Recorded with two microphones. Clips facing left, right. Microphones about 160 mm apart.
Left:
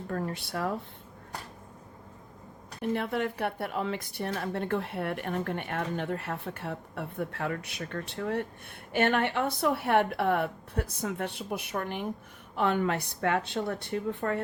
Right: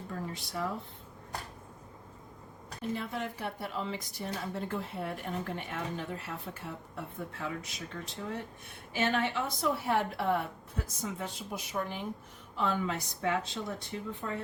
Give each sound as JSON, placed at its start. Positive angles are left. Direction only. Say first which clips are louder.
{"t": 0.1, "sound": "a woman's voice", "louder": "left 6 dB", "side_deg": 60}
{"t": 2.9, "sound": "a woman's voice", "louder": "left 7 dB", "side_deg": 65}